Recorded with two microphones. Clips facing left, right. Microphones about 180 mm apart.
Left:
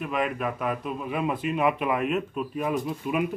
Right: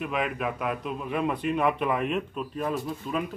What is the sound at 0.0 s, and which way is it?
A man's voice, centre (ahead or behind).